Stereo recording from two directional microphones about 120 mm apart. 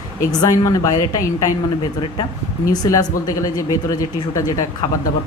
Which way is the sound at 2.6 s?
30° left (ahead or behind).